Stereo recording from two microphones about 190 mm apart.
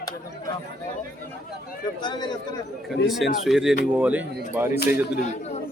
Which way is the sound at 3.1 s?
Centre (ahead or behind).